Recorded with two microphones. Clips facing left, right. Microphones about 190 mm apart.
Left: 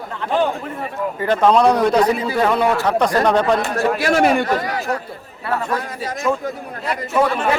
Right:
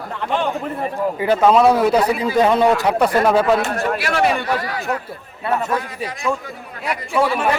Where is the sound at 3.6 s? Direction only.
40° left (ahead or behind).